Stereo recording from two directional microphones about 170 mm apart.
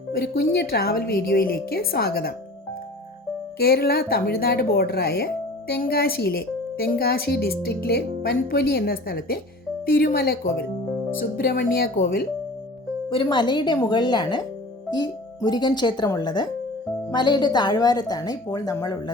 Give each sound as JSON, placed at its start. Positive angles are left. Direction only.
{"t": 0.1, "sound": "speech", "side_deg": 70}
{"t": 3.6, "sound": "speech", "side_deg": 65}
{"t": 13.1, "sound": "speech", "side_deg": 30}